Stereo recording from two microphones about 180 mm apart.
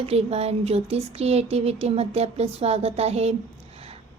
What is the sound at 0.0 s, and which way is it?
A woman's voice, 35° right (ahead or behind).